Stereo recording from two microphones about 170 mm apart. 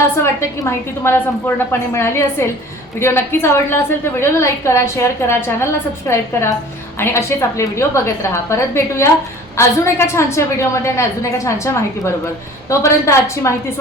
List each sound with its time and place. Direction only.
0.2 s a woman's voice: 15° left (ahead or behind)